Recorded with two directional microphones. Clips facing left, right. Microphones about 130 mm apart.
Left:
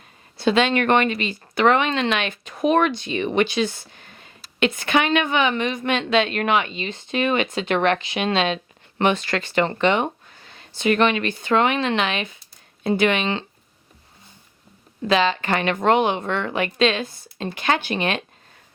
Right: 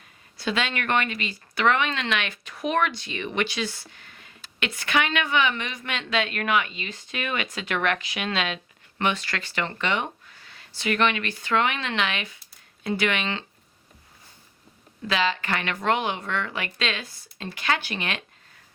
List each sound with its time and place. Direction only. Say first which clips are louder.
0.3 s a woman's voice: left 9 dB; 25° left (ahead or behind)
9.8 s a sound: left 7 dB; 25° left (ahead or behind)
10.8 s a woman's voice: left 5 dB; 25° left (ahead or behind)
15.0 s a woman's voice: left 6 dB; 30° left (ahead or behind)